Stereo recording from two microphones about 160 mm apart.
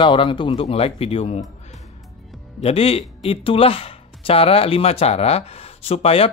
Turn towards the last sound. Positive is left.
turn(degrees=40)  # may be behind; listen again after turning